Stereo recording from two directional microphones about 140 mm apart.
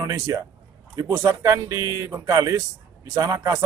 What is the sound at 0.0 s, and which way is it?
A man's voice, 25° right (ahead or behind).